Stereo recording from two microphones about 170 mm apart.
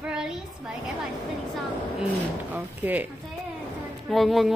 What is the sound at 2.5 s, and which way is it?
Speech, 10° right (ahead or behind).